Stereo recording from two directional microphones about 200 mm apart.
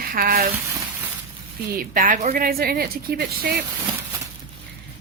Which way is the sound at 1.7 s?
45° right (ahead or behind).